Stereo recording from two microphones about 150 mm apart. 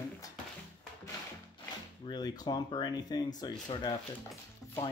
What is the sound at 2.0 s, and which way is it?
Speech, 25° left (ahead or behind).